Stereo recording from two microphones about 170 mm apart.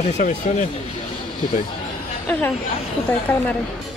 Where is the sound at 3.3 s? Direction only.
10° left (ahead or behind).